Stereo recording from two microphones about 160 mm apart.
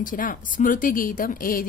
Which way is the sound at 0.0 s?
60° left (ahead or behind).